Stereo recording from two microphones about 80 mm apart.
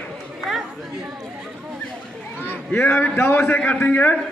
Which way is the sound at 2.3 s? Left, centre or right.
Left.